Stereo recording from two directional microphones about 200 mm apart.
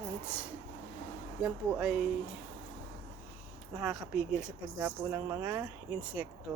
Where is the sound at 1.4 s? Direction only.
5° right (ahead or behind).